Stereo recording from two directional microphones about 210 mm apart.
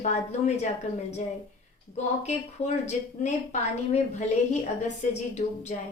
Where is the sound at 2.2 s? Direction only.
30° left (ahead or behind).